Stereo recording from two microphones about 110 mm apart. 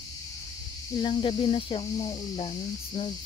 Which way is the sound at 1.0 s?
55° left (ahead or behind).